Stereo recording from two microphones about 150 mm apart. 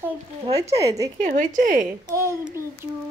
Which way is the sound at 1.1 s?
55° right (ahead or behind).